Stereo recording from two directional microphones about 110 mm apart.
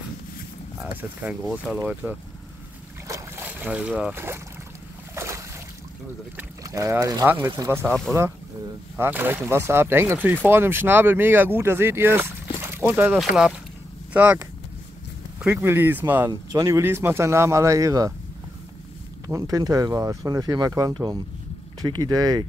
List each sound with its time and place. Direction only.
1.7 s speech: 15° right (ahead or behind)
3.1 s boat: 20° right (ahead or behind)
6.6 s speech: 30° right (ahead or behind)
8.9 s speech: 20° right (ahead or behind)
13.2 s speech: 5° right (ahead or behind)
16.3 s speech: 30° right (ahead or behind)
19.2 s speech: 30° right (ahead or behind)